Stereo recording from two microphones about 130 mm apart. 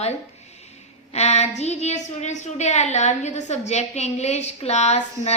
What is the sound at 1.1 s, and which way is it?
A woman's voice, 55° left (ahead or behind).